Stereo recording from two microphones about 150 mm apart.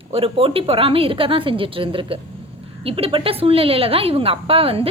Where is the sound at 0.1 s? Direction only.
40° right (ahead or behind).